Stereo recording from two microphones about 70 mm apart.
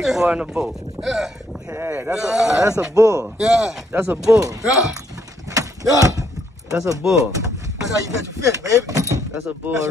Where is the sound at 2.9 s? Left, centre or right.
Right.